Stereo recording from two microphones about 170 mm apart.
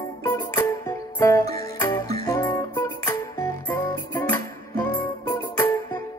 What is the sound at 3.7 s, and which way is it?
Music, 10° left (ahead or behind).